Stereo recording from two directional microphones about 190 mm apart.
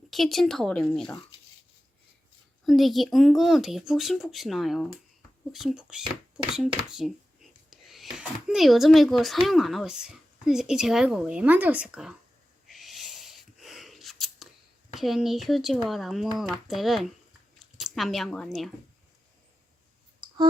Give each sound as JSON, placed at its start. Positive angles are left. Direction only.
{"t": 0.1, "sound": "speech", "side_deg": 0}
{"t": 2.6, "sound": "speech", "side_deg": 0}
{"t": 12.6, "sound": "a sound", "side_deg": 0}
{"t": 14.9, "sound": "speech", "side_deg": 0}
{"t": 20.2, "sound": "clicking", "side_deg": -25}